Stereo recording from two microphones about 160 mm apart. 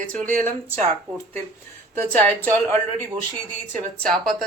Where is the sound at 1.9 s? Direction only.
10° left (ahead or behind).